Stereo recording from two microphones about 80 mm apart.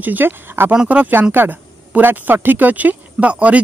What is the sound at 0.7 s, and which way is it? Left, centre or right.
Speech, centre.